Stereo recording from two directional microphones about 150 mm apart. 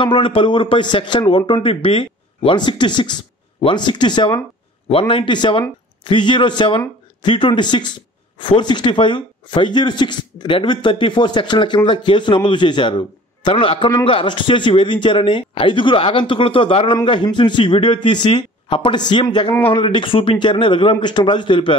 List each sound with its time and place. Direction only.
0.0 s speech: 35° left (ahead or behind)